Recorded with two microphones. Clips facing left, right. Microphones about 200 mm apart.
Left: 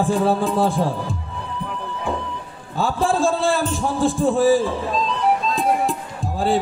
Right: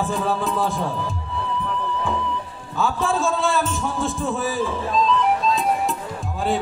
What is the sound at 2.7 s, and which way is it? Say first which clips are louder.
A man's voice: left 2 dB; 35° left (ahead or behind).